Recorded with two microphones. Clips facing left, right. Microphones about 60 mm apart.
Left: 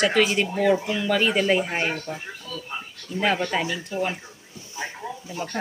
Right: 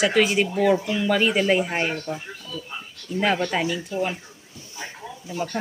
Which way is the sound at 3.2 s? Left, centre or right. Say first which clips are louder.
Right 1 dB; centre.